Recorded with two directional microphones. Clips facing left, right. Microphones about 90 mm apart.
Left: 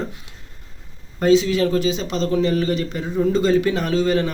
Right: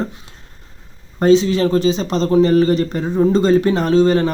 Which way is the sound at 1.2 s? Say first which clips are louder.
Right 3 dB; 30° right (ahead or behind).